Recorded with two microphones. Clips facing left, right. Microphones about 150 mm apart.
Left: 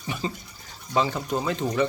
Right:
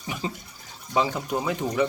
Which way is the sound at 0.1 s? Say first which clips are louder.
Left 1 dB; 5° right (ahead or behind).